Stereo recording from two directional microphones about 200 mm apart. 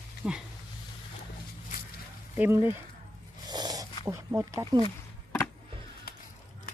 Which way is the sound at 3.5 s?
20° right (ahead or behind).